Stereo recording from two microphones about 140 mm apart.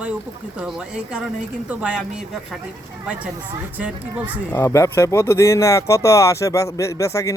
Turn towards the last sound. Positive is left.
turn(degrees=20)  # may be behind; listen again after turning